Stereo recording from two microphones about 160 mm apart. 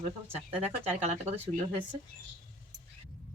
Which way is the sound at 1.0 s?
45° right (ahead or behind).